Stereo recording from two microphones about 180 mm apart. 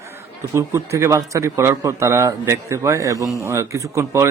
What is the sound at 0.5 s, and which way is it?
A man's voice, 15° right (ahead or behind).